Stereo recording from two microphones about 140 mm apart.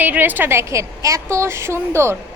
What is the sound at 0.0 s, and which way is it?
A woman's voice, 15° right (ahead or behind).